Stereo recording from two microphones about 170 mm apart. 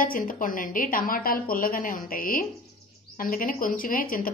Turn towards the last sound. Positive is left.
turn(degrees=55)  # may be behind; listen again after turning